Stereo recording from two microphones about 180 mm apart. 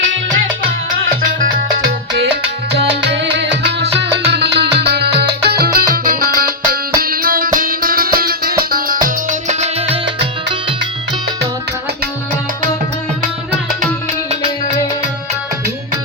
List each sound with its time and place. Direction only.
1.2 s salsa music: 50° right (ahead or behind)
2.7 s music: 70° right (ahead or behind); by 10.0 s 35° right (ahead or behind)